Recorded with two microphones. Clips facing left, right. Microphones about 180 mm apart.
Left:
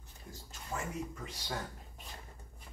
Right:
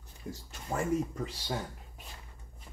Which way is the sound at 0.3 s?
65° right (ahead or behind).